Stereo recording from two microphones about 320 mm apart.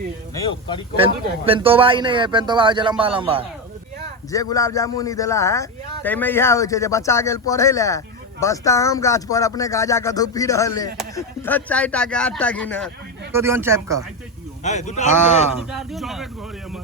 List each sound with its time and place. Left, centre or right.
0.9 s speech: centre
4.3 s speech: centre
13.3 s speech: centre
14.6 s speech: left
15.7 s speech: centre